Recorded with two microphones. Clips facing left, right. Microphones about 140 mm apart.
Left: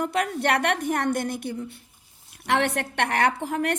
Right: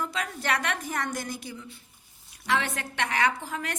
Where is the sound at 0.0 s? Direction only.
65° left (ahead or behind).